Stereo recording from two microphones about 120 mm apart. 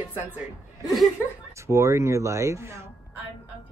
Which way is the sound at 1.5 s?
25° right (ahead or behind).